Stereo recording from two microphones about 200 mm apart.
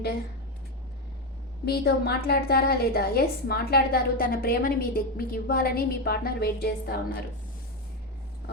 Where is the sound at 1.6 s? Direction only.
50° left (ahead or behind).